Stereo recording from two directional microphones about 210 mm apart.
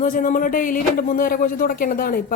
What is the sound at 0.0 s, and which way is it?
Speech, 40° left (ahead or behind).